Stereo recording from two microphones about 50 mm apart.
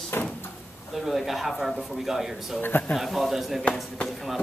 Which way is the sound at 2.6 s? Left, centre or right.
Left.